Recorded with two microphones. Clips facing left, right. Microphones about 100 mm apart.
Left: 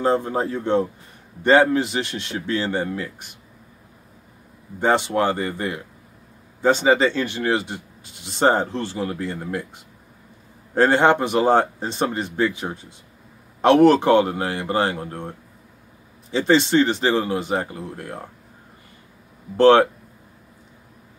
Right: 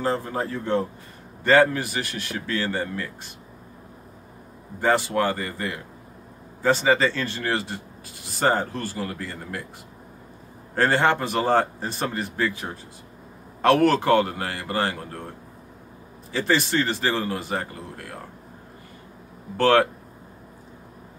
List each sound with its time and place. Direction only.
0.0 s speech: 20° left (ahead or behind)
4.7 s speech: 20° left (ahead or behind)
10.7 s speech: 20° left (ahead or behind)
19.5 s speech: 20° left (ahead or behind)